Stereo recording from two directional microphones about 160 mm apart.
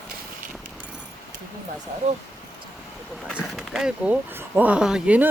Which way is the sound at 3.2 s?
Centre (ahead or behind).